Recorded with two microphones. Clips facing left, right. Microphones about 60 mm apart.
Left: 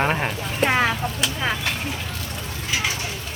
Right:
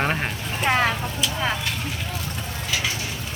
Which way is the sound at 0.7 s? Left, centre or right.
Centre.